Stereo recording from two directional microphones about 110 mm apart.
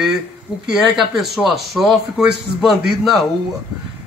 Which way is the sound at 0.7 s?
5° right (ahead or behind).